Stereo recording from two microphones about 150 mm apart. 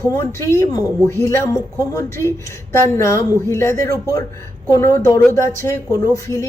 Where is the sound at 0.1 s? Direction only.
20° left (ahead or behind).